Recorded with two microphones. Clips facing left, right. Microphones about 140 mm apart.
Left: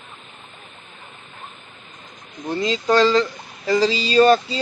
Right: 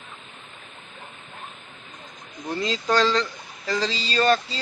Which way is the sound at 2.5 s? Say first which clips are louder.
Left 5 dB; centre (ahead or behind).